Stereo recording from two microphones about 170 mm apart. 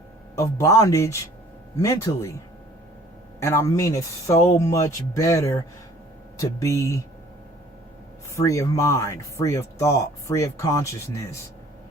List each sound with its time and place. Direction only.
0.6 s speech: 20° left (ahead or behind)
3.4 s speech: 15° left (ahead or behind)
8.4 s speech: 20° left (ahead or behind)